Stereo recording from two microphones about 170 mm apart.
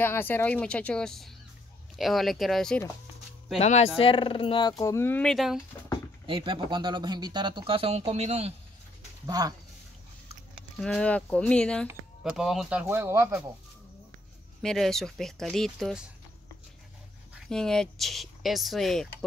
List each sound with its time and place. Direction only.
0.0 s speech: 10° left (ahead or behind)
3.5 s speech: 40° left (ahead or behind); by 5.6 s centre (ahead or behind)
6.2 s speech: 30° right (ahead or behind)
9.2 s speech: 20° right (ahead or behind)
10.5 s speech: centre (ahead or behind)
11.9 s speech: 5° right (ahead or behind)
14.6 s speech: 5° left (ahead or behind)
17.3 s speech: centre (ahead or behind)